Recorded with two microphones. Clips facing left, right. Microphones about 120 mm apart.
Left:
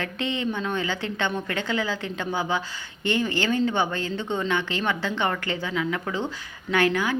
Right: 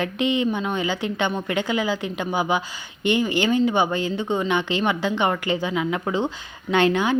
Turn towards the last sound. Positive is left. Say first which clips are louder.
# right 3 dB
turn(degrees=-20)  # may be behind; listen again after turning